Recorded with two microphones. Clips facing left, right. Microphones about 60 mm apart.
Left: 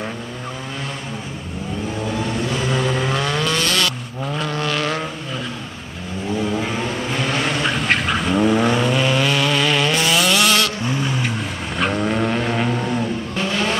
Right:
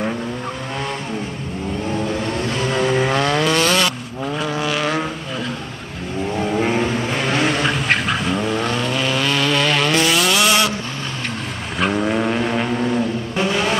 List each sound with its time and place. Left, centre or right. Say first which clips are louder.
2.7 s vehicle: right 5 dB; centre
3.5 s vehicle: right 3 dB; right
4.2 s vehicle: right 1 dB; centre
6.8 s vehicle: right 2 dB; centre
10.9 s vehicle: left 5 dB; centre
11.8 s vehicle: right 1 dB; centre
13.4 s vehicle: right 3 dB; centre